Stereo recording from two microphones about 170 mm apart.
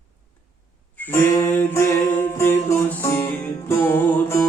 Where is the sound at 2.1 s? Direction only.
15° left (ahead or behind).